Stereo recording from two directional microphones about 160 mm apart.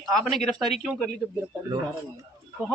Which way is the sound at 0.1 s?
Centre (ahead or behind).